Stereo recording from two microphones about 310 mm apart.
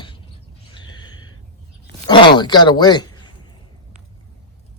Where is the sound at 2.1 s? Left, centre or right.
Centre.